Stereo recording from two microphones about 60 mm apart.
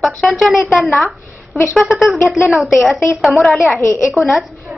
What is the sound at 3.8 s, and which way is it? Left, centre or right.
Speech, left.